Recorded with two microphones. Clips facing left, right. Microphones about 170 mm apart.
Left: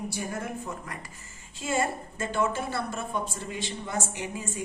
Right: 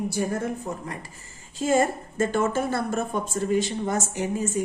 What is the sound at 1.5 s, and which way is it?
A woman's voice, 40° right (ahead or behind).